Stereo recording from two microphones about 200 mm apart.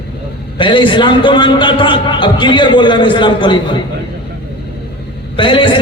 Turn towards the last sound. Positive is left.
turn(degrees=25)  # may be behind; listen again after turning